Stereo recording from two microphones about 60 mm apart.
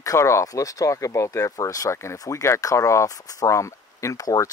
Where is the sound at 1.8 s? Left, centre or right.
Left.